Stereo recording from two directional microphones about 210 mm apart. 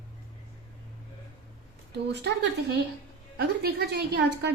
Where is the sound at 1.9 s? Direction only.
55° right (ahead or behind).